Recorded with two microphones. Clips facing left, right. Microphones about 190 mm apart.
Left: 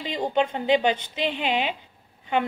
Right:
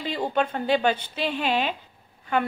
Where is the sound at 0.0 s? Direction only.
15° left (ahead or behind).